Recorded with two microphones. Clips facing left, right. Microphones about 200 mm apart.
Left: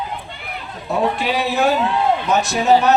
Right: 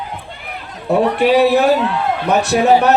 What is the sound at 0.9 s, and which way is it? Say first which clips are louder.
Music: right 6 dB; 60° right (ahead or behind).